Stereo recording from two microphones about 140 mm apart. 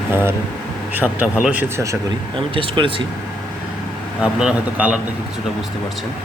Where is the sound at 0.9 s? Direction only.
10° right (ahead or behind).